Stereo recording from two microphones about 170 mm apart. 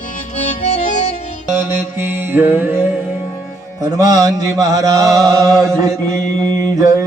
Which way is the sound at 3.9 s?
20° right (ahead or behind).